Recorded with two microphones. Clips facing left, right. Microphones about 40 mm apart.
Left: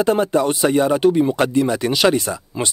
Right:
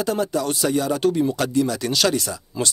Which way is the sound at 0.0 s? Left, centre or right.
Left.